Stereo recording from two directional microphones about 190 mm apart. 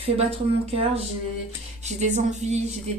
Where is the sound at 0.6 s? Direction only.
30° right (ahead or behind).